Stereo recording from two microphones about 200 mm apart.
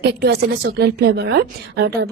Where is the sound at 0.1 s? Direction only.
50° right (ahead or behind).